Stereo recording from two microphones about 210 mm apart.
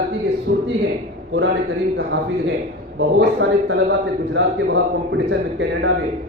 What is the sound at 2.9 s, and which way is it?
A man's voice, 60° right (ahead or behind).